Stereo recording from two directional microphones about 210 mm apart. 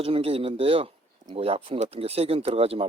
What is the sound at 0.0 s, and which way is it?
Speech, 25° right (ahead or behind).